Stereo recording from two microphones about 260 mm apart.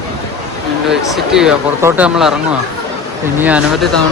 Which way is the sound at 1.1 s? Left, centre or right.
Centre.